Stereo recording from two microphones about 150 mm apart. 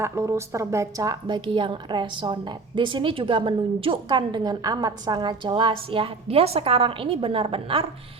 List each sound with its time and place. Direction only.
0.0 s a woman's voice: 20° right (ahead or behind); by 7.9 s 40° right (ahead or behind)